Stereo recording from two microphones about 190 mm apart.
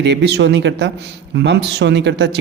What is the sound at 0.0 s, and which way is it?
A man's voice, 65° right (ahead or behind).